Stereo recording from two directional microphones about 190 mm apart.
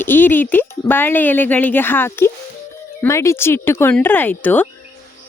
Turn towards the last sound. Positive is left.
turn(degrees=10)  # may be behind; listen again after turning